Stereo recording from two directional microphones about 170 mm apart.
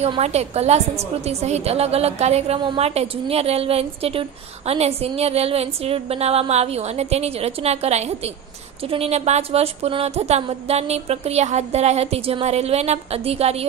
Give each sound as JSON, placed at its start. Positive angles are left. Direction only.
{"t": 0.0, "sound": "a woman's voice", "side_deg": -40}